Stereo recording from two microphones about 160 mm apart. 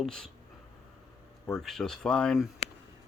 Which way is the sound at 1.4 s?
Centre (ahead or behind).